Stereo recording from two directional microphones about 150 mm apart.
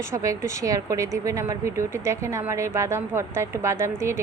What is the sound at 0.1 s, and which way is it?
A woman's voice, 20° right (ahead or behind).